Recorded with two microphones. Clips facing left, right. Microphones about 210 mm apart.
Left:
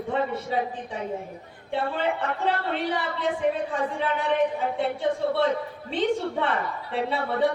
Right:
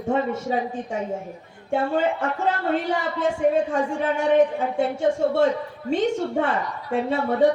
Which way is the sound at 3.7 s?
45° right (ahead or behind).